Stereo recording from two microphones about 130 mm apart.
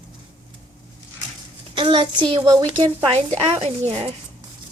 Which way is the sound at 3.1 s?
55° right (ahead or behind).